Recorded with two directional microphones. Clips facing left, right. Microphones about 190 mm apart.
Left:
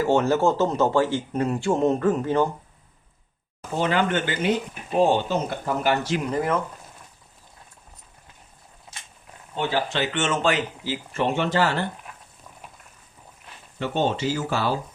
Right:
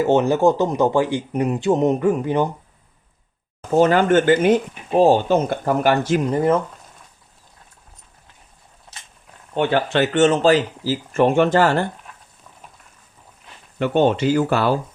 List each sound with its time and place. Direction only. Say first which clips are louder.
0.0 s speech: right 4 dB; 20° right (ahead or behind)
3.8 s speech: right 8 dB; 45° right (ahead or behind)
5.3 s speech: right 7 dB; 55° right (ahead or behind)
6.3 s speech: right 6 dB; 30° right (ahead or behind)
9.6 s speech: right 7 dB; 60° right (ahead or behind)
13.7 s speech: right 7 dB; 60° right (ahead or behind)